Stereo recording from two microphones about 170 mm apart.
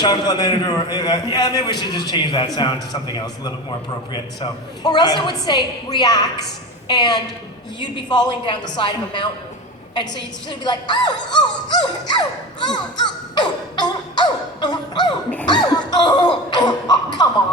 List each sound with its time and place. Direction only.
0.0 s music: 25° left (ahead or behind)
10.6 s music: 25° left (ahead or behind)